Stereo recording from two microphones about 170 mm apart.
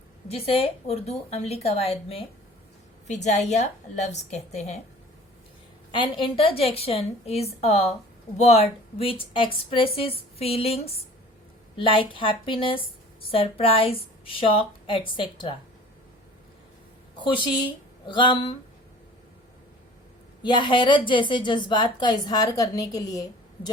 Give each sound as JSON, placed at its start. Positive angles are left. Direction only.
{"t": 0.3, "sound": "a woman's voice", "side_deg": 35}
{"t": 3.2, "sound": "a woman's voice", "side_deg": 40}
{"t": 5.9, "sound": "a woman's voice", "side_deg": 30}
{"t": 17.2, "sound": "speech", "side_deg": 30}
{"t": 20.4, "sound": "a woman's voice", "side_deg": 25}